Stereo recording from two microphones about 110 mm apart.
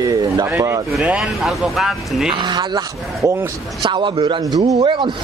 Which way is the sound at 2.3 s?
45° right (ahead or behind).